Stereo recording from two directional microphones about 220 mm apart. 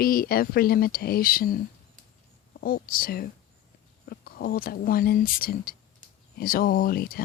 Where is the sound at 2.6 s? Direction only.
40° left (ahead or behind).